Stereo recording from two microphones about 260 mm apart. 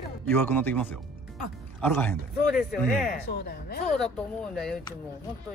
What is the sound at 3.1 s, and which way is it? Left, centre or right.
Speech, left.